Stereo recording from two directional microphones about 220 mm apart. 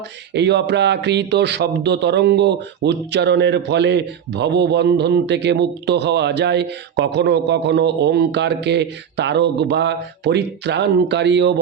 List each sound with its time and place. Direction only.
0.3 s speech: 50° right (ahead or behind)